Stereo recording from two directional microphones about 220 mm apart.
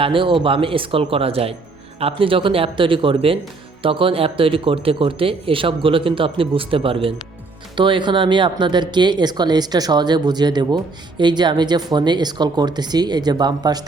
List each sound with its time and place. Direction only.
0.0 s speech: 25° right (ahead or behind)